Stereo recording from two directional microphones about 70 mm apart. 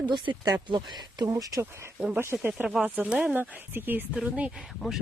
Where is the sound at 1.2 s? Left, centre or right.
Right.